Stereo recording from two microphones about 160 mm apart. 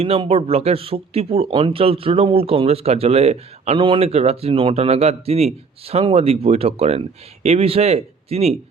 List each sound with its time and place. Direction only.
0.0 s speech: 40° right (ahead or behind)